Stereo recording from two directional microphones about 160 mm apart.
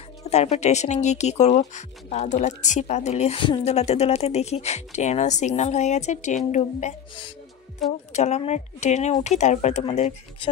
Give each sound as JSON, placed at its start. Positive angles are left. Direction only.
{"t": 0.2, "sound": "speech", "side_deg": 45}
{"t": 8.1, "sound": "speech", "side_deg": 45}